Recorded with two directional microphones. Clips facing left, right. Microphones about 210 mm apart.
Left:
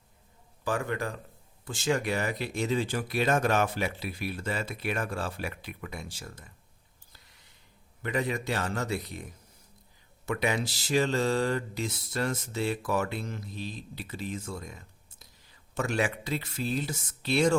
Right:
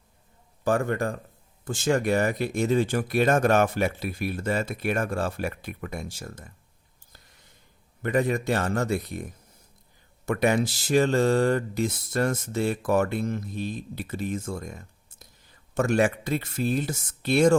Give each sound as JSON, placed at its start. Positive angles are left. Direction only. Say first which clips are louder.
{"t": 0.6, "sound": "speech", "louder": "right 6 dB", "side_deg": -45}
{"t": 8.0, "sound": "speech", "louder": "right 6 dB", "side_deg": -50}